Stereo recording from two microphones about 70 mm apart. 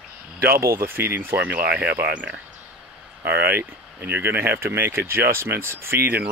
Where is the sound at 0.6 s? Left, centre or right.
Right.